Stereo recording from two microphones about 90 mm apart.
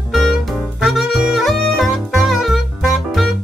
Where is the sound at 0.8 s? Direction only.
Centre (ahead or behind).